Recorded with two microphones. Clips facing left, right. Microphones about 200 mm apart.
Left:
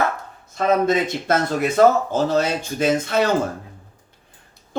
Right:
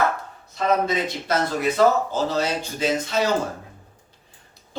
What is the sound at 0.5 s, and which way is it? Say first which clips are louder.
Speech: left 4 dB; 50° left (ahead or behind).